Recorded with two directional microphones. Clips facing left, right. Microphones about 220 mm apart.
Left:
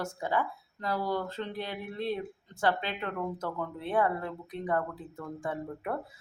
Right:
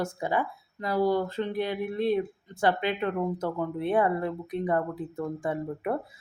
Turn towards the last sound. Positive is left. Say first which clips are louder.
# right 5 dB
turn(degrees=-15)  # may be behind; listen again after turning